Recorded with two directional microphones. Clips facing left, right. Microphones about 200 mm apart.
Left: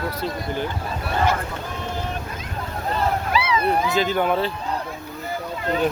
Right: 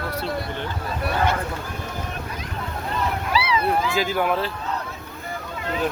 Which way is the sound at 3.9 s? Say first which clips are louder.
Left 2 dB; 5° right (ahead or behind).